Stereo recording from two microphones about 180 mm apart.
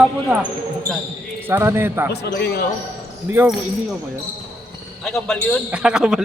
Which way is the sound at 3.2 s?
10° right (ahead or behind).